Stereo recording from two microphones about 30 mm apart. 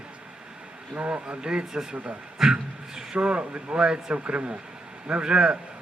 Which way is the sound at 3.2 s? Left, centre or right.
Right.